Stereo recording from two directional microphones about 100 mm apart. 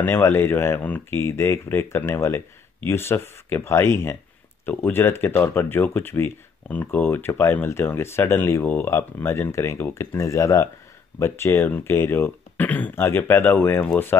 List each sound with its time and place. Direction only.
0.0 s speech: 25° left (ahead or behind)